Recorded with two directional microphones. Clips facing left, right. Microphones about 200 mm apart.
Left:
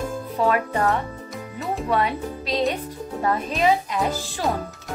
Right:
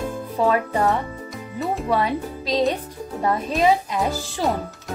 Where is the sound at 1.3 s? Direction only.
Centre (ahead or behind).